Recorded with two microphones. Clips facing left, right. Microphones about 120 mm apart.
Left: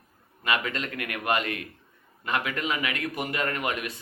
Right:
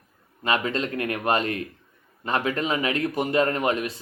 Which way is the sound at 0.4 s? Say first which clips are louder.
Right 4 dB; 30° right (ahead or behind).